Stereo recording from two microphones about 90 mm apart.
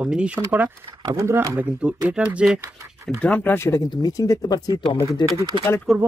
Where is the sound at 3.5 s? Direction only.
30° left (ahead or behind).